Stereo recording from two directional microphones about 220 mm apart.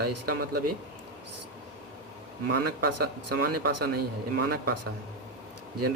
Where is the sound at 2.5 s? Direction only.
45° right (ahead or behind).